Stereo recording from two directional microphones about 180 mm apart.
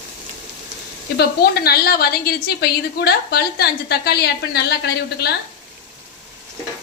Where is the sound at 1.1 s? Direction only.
60° left (ahead or behind).